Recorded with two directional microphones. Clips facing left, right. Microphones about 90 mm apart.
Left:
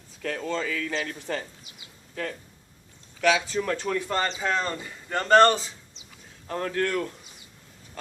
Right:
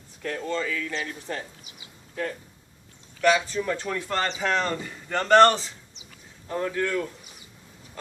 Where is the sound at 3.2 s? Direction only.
90° left.